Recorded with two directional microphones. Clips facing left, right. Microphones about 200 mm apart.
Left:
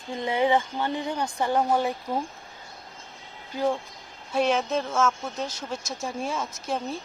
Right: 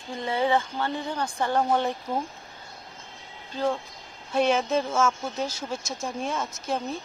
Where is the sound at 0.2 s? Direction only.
15° left (ahead or behind).